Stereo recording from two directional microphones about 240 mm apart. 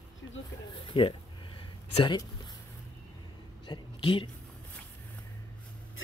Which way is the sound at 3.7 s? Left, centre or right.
Centre.